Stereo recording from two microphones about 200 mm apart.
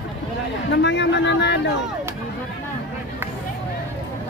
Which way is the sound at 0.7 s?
60° left (ahead or behind).